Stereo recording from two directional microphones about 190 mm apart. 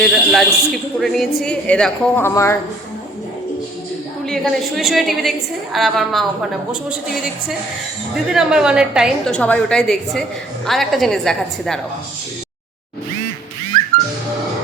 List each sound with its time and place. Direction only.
0.1 s a woman's voice: 5° right (ahead or behind); by 2.6 s 15° left (ahead or behind)
4.3 s a woman's voice: centre (ahead or behind)
8.1 s a woman's voice: 5° right (ahead or behind)